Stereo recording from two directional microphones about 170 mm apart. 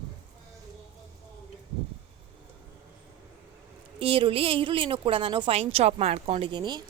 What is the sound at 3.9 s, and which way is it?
A woman's voice, 30° right (ahead or behind).